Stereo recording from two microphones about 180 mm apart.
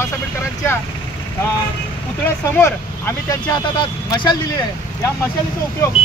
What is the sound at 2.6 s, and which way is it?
Speech, 15° left (ahead or behind).